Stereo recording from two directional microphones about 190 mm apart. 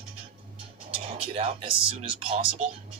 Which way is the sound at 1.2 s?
30° right (ahead or behind).